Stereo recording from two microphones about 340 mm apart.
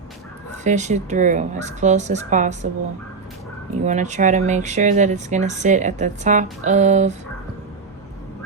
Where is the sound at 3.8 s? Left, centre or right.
Right.